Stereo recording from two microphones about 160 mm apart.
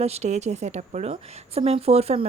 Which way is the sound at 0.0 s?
45° right (ahead or behind).